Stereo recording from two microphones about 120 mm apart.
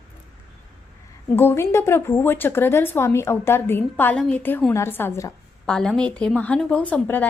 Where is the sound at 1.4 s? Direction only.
20° left (ahead or behind).